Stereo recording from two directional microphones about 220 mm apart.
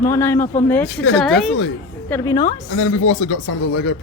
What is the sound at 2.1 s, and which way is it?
Speech, 15° left (ahead or behind).